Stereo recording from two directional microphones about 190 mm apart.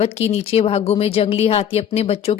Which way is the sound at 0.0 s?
35° left (ahead or behind).